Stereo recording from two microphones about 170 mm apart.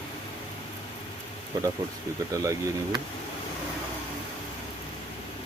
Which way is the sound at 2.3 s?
20° right (ahead or behind).